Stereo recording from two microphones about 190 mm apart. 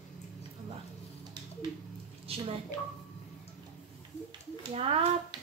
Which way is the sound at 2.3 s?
30° right (ahead or behind).